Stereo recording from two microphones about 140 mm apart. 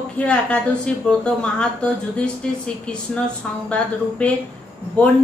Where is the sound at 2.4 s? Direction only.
5° left (ahead or behind).